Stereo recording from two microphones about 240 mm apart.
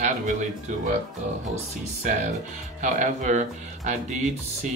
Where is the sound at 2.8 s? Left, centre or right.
Right.